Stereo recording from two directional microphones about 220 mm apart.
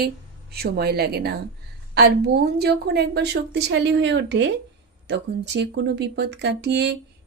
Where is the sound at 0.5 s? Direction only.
45° right (ahead or behind).